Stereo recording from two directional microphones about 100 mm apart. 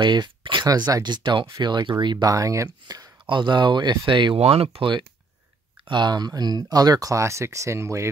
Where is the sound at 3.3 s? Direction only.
50° right (ahead or behind).